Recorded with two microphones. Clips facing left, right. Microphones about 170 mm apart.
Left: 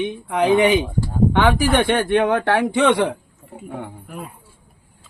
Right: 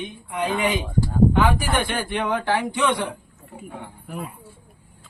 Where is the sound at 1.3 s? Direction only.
70° left (ahead or behind).